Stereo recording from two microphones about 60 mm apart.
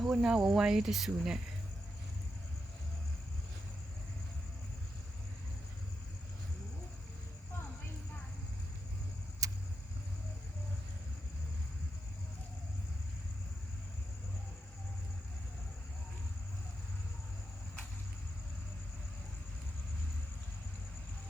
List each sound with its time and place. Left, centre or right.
0.0 s speech: centre
9.4 s vehicle: right